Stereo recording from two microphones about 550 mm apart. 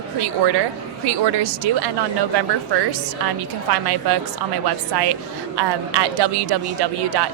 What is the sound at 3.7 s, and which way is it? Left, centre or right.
A woman's voice, right.